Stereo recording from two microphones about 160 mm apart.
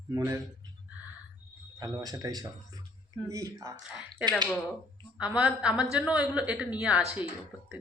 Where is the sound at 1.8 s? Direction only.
25° right (ahead or behind).